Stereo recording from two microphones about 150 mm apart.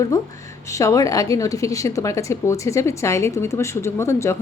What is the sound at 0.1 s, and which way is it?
A woman's voice, 20° left (ahead or behind).